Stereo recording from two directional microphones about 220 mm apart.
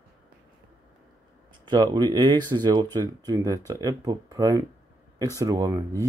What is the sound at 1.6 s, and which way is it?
Speech, 20° right (ahead or behind).